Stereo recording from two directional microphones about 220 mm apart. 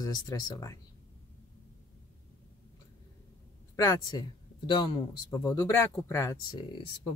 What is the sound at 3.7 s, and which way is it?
Speech, 15° left (ahead or behind).